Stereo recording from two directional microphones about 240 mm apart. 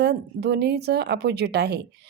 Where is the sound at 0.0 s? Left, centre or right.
Right.